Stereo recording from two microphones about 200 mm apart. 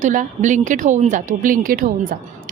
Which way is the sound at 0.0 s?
40° right (ahead or behind).